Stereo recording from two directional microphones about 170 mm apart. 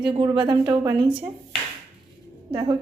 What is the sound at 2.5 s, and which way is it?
Speech, 30° right (ahead or behind).